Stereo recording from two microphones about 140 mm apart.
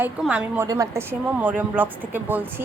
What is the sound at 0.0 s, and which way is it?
Speech, 10° right (ahead or behind).